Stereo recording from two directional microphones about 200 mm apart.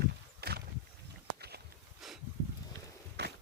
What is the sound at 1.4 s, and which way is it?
Walk, 55° right (ahead or behind).